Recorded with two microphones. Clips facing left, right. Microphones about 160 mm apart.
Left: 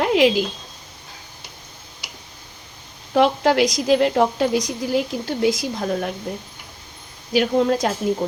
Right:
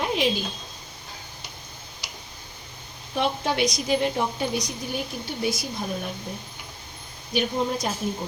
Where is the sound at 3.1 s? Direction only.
90° left.